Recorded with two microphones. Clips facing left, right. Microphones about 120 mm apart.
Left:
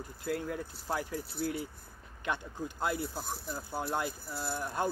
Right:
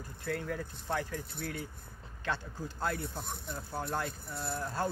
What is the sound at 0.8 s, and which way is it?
Speech, 10° left (ahead or behind).